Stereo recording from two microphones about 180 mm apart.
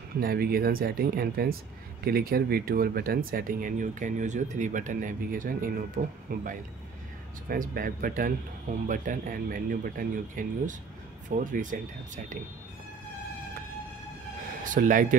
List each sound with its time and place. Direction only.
0.2 s speech: 55° right (ahead or behind)
14.6 s speech: 45° right (ahead or behind)